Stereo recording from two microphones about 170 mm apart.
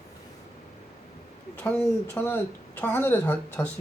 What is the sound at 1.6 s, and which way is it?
Speech, 10° left (ahead or behind).